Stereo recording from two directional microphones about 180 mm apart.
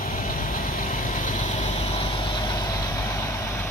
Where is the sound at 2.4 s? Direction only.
20° left (ahead or behind).